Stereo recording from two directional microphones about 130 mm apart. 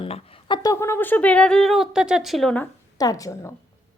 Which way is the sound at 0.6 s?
25° left (ahead or behind).